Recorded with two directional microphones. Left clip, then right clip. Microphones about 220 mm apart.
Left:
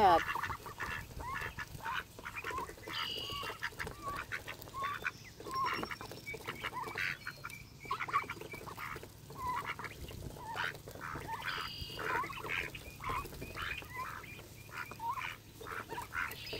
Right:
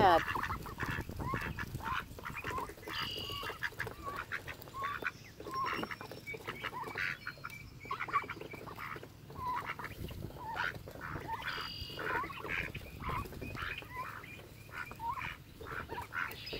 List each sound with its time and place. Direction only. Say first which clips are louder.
0.2 s goose: right 1 dB; 35° right (ahead or behind); by 5.9 s centre (ahead or behind)
6.0 s duck: even; centre (ahead or behind)
9.6 s fowl: even; centre (ahead or behind)
10.5 s a sound: right 1 dB; centre (ahead or behind)
14.8 s duck: even; 5° right (ahead or behind)